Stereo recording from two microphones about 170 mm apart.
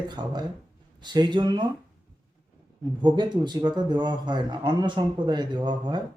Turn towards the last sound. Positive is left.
turn(degrees=-25)  # may be behind; listen again after turning